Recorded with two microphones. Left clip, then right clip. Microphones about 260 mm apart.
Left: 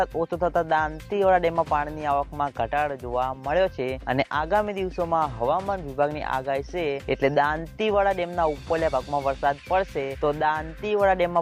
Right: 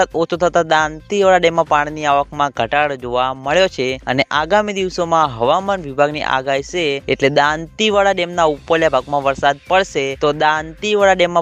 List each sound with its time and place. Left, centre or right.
0.2 s speech: right